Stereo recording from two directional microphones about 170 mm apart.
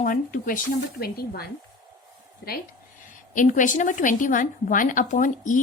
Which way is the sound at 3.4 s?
50° left (ahead or behind).